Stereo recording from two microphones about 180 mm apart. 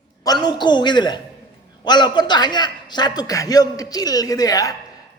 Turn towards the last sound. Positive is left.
turn(degrees=20)  # may be behind; listen again after turning